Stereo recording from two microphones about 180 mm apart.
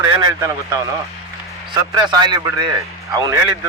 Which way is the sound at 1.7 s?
25° right (ahead or behind).